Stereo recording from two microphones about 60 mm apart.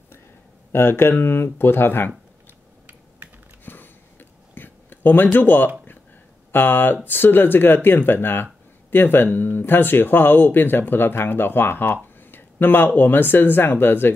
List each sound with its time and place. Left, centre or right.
0.7 s speech: left
3.6 s a sound: left
6.5 s speech: left